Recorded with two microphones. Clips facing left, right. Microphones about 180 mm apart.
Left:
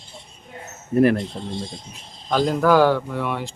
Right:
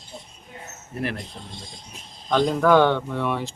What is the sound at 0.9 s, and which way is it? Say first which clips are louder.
Speech: left 13 dB; 45° left (ahead or behind).